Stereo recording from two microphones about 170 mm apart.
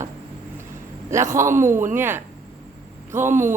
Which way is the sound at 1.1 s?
15° right (ahead or behind).